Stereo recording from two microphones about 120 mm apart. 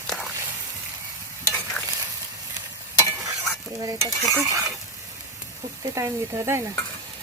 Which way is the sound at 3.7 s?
30° right (ahead or behind).